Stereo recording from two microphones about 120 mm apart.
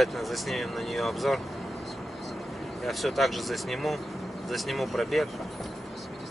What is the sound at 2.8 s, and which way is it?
Speech, centre (ahead or behind).